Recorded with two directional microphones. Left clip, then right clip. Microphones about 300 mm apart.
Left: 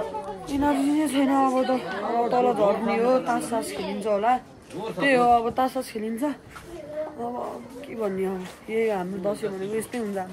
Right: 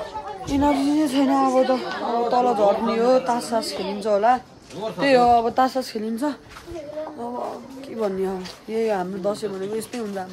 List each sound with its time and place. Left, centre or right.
0.5 s speech: centre
8.0 s speech: centre